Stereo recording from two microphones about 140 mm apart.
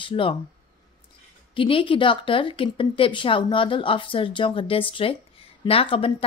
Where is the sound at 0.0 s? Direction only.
40° left (ahead or behind).